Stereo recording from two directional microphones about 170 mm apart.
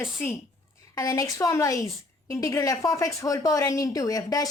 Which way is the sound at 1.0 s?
20° left (ahead or behind).